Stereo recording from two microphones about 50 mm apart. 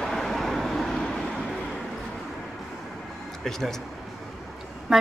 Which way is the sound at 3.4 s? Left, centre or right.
Centre.